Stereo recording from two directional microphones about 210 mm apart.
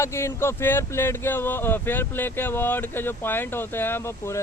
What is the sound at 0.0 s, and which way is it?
Speech, 15° left (ahead or behind).